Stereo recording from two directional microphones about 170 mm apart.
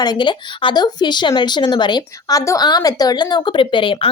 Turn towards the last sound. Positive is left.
turn(degrees=30)  # may be behind; listen again after turning